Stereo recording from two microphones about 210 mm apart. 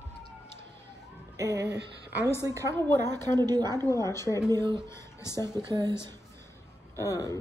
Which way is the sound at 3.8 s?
15° left (ahead or behind).